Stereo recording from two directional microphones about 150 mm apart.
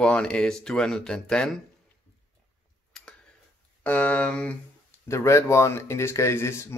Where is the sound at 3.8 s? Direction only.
10° left (ahead or behind).